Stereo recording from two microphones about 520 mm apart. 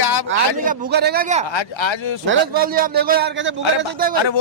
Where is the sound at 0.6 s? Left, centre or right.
Centre.